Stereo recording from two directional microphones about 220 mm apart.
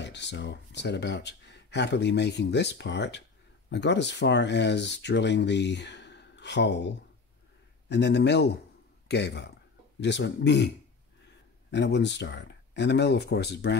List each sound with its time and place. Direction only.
0.0 s speech: 50° left (ahead or behind)
7.9 s speech: 50° left (ahead or behind)
11.7 s speech: 50° left (ahead or behind)